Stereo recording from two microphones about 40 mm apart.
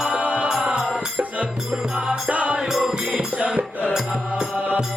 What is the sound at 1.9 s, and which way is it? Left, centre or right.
Music, centre.